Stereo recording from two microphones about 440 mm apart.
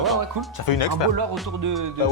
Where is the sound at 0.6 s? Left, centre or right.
Left.